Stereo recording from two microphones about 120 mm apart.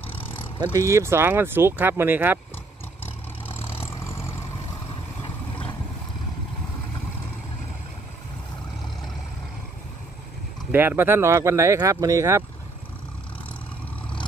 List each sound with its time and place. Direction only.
0.7 s speech: 25° right (ahead or behind)
3.8 s vehicle: 25° left (ahead or behind)
5.2 s vehicle: 45° left (ahead or behind)
10.7 s speech: 15° right (ahead or behind)